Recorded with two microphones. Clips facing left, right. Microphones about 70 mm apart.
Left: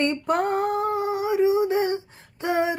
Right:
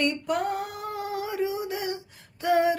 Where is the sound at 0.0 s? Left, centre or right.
Left.